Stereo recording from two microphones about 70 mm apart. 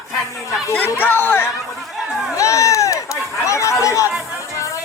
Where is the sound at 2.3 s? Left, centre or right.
Left.